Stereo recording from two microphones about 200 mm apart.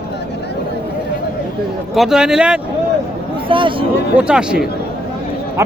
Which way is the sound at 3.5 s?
25° right (ahead or behind).